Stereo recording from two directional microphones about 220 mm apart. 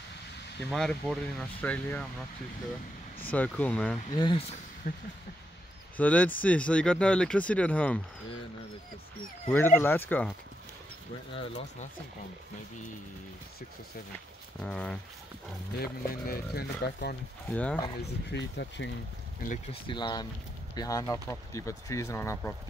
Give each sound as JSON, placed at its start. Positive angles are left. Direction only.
{"t": 0.7, "sound": "speech", "side_deg": 0}
{"t": 3.3, "sound": "speech", "side_deg": 5}
{"t": 4.1, "sound": "speech", "side_deg": 20}
{"t": 4.9, "sound": "speech", "side_deg": 35}
{"t": 5.9, "sound": "speech", "side_deg": 5}
{"t": 9.5, "sound": "speech", "side_deg": 10}
{"t": 11.3, "sound": "speech", "side_deg": 30}
{"t": 14.6, "sound": "speech", "side_deg": 5}
{"t": 15.8, "sound": "speech", "side_deg": 45}
{"t": 17.5, "sound": "speech", "side_deg": 5}
{"t": 18.0, "sound": "speech", "side_deg": 50}
{"t": 19.4, "sound": "speech", "side_deg": 35}
{"t": 19.9, "sound": "speech", "side_deg": 20}